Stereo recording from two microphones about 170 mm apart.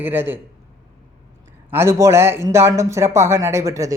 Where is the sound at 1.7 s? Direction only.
15° right (ahead or behind).